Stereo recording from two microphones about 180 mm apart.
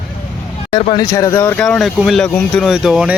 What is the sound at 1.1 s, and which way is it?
Speech, 15° left (ahead or behind).